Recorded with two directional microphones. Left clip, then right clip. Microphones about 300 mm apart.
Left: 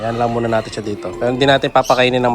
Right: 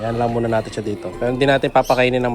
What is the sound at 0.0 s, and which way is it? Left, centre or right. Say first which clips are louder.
A man's voice: left 2 dB; centre.